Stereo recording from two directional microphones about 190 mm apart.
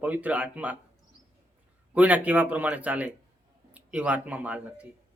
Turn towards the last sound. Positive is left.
turn(degrees=-5)  # may be behind; listen again after turning